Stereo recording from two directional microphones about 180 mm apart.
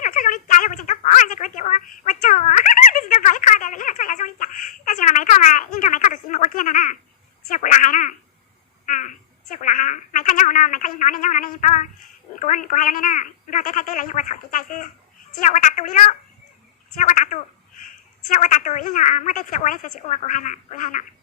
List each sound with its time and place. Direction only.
0.0 s a sound: 45° left (ahead or behind)
2.2 s a woman's voice: 45° left (ahead or behind)
9.6 s a woman's voice: 45° left (ahead or behind)